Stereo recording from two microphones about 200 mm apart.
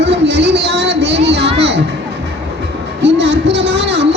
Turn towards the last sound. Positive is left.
turn(degrees=-60)  # may be behind; listen again after turning